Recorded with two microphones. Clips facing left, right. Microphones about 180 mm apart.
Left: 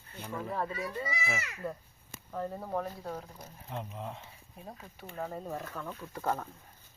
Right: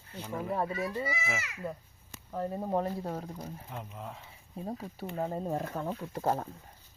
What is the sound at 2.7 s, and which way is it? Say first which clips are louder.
Speech: right 4 dB; 35° right (ahead or behind).